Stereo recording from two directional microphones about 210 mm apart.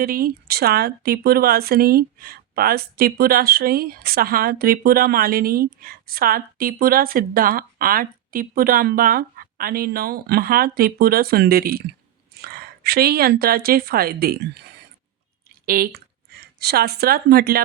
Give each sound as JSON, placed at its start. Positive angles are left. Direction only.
{"t": 0.0, "sound": "a woman's voice", "side_deg": -45}